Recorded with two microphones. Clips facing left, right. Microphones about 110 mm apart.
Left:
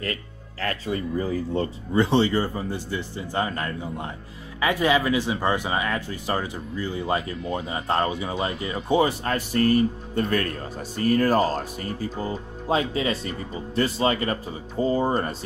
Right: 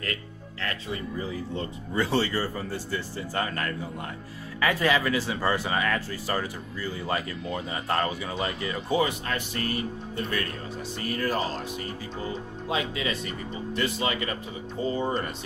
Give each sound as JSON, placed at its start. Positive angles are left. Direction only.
{"t": 0.0, "sound": "speech", "side_deg": 30}
{"t": 2.0, "sound": "speech", "side_deg": 20}
{"t": 9.2, "sound": "speech", "side_deg": 40}